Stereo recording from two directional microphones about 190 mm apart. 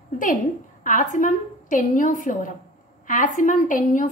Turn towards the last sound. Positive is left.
turn(degrees=45)  # may be behind; listen again after turning